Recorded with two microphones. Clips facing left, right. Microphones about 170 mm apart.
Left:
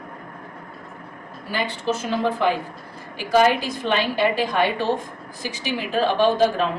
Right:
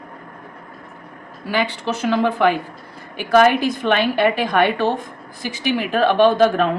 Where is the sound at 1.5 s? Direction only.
70° right (ahead or behind).